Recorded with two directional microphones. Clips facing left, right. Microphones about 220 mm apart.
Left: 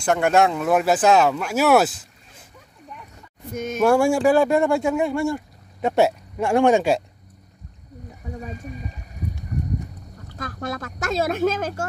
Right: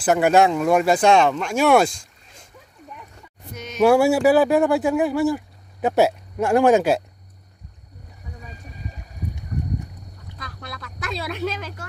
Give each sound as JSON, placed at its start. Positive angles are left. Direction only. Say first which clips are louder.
{"t": 0.0, "sound": "speech", "louder": "right 2 dB", "side_deg": -5}
{"t": 3.5, "sound": "speech", "louder": "left 7 dB", "side_deg": 50}
{"t": 3.8, "sound": "speech", "louder": "right 2 dB", "side_deg": -5}
{"t": 10.3, "sound": "speech", "louder": "left 9 dB", "side_deg": 45}